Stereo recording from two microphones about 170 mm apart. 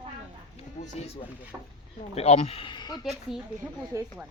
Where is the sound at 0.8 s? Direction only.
35° left (ahead or behind).